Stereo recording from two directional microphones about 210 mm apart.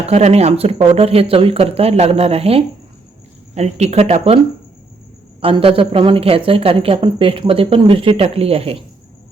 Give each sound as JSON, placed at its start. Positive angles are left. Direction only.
{"t": 0.0, "sound": "a woman's voice", "side_deg": -30}
{"t": 5.4, "sound": "a woman's voice", "side_deg": -25}